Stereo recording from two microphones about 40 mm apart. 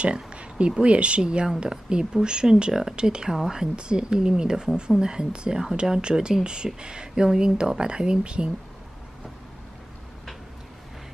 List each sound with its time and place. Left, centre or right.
0.0 s speech: right